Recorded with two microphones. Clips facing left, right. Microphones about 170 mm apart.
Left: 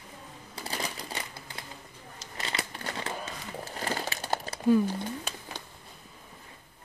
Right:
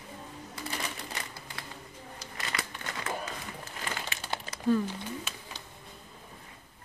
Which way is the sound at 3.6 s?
35° left (ahead or behind).